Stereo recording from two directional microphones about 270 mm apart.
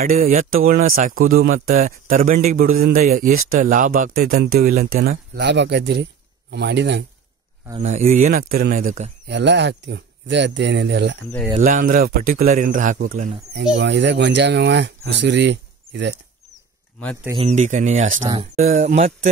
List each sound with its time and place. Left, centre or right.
0.0 s a man's voice: right
7.8 s speech: right
9.3 s a man's voice: right
11.5 s a man's voice: right
13.6 s a man's voice: right
17.2 s speech: centre
17.5 s speech: right